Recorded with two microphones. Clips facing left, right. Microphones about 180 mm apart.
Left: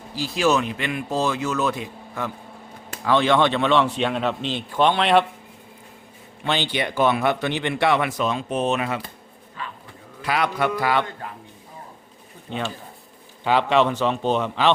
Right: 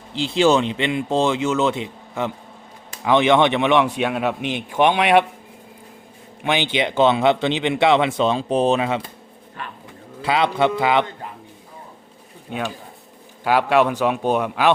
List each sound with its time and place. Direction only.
0.1 s speech: 25° right (ahead or behind)
6.4 s speech: 15° right (ahead or behind)
10.2 s speech: 25° right (ahead or behind)
12.5 s speech: 10° right (ahead or behind)